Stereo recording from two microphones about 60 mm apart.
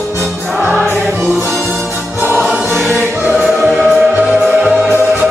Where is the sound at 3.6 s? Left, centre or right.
Centre.